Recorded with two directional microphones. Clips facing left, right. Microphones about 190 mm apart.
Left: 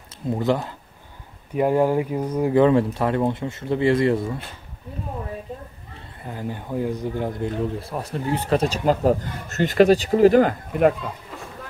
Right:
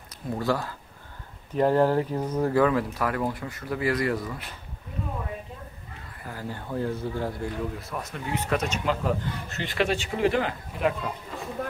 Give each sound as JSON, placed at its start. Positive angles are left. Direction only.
{"t": 0.3, "sound": "speech", "side_deg": 20}
{"t": 2.6, "sound": "speech", "side_deg": 25}
{"t": 5.9, "sound": "speech", "side_deg": 20}
{"t": 10.7, "sound": "speech", "side_deg": 50}